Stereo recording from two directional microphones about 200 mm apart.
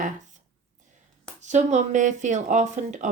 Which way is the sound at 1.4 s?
35° right (ahead or behind).